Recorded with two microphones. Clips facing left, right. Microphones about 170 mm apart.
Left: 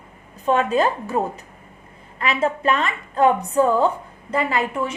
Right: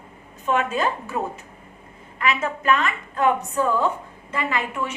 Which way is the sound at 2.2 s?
35° left (ahead or behind).